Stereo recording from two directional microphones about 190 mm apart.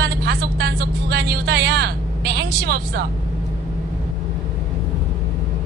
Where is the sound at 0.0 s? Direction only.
55° right (ahead or behind).